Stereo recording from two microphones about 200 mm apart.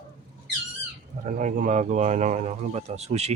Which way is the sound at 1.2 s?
40° right (ahead or behind).